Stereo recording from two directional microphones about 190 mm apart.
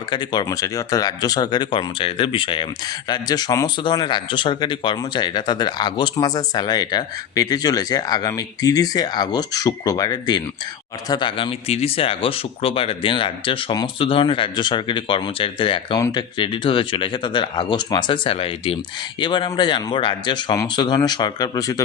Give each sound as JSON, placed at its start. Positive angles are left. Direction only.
{"t": 0.1, "sound": "speech", "side_deg": 20}